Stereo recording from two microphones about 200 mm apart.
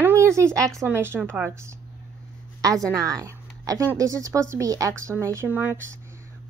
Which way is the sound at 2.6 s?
15° right (ahead or behind).